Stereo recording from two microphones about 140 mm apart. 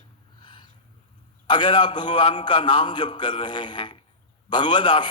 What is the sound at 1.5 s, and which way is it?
A man's voice, 35° left (ahead or behind).